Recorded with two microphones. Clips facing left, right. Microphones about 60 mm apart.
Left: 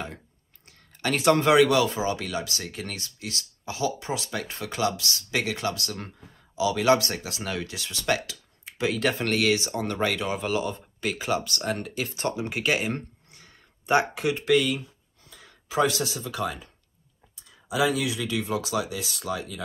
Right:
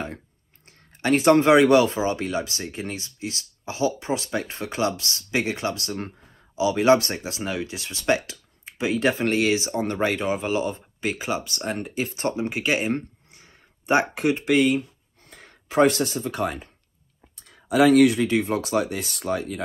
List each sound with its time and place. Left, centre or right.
0.7 s speech: right
15.2 s speech: right
17.4 s a sound: right
18.2 s speech: right